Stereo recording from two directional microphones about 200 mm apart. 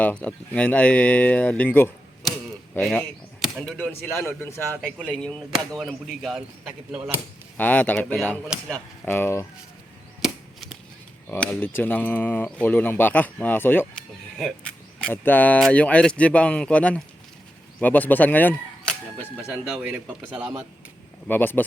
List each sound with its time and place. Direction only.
0.0 s speech: 5° left (ahead or behind)
7.5 s speech: 10° left (ahead or behind)
10.2 s chop: centre (ahead or behind)
11.3 s speech: 10° left (ahead or behind)
19.6 s speech: 5° right (ahead or behind)
21.2 s speech: 10° left (ahead or behind)